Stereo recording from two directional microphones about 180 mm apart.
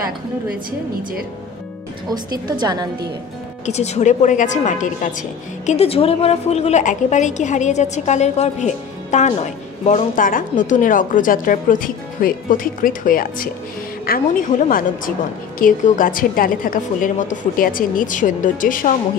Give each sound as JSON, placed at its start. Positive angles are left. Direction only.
{"t": 2.0, "sound": "a woman's voice", "side_deg": -25}
{"t": 3.6, "sound": "a woman's voice", "side_deg": 35}
{"t": 5.7, "sound": "a woman's voice", "side_deg": 35}